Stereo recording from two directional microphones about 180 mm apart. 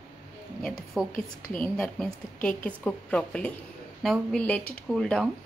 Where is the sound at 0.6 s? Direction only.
Centre (ahead or behind).